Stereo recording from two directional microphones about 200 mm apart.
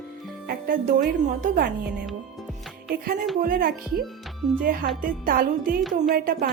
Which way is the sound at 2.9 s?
50° right (ahead or behind).